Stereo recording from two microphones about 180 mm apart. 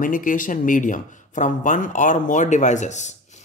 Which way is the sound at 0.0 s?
50° left (ahead or behind).